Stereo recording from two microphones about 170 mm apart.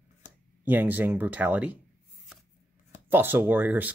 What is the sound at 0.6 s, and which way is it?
Speech, 10° right (ahead or behind).